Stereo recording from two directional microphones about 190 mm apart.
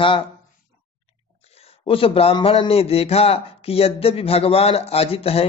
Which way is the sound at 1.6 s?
30° left (ahead or behind).